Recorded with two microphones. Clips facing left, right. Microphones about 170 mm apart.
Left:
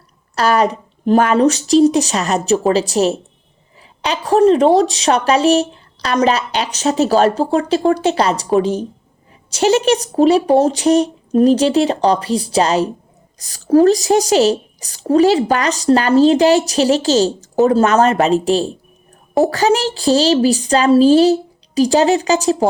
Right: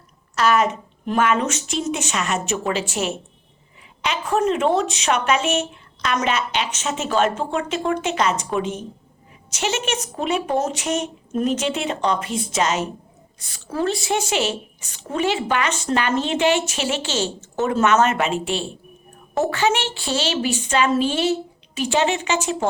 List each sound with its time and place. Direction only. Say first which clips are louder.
0.3 s a woman's voice: left 4 dB; 35° left (ahead or behind)